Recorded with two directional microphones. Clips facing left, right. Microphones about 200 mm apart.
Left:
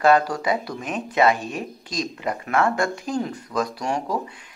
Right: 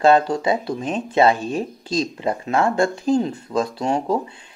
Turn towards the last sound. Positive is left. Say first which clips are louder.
# right 5 dB
turn(degrees=-25)  # may be behind; listen again after turning